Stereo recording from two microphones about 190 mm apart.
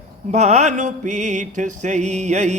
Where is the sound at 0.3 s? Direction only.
35° right (ahead or behind).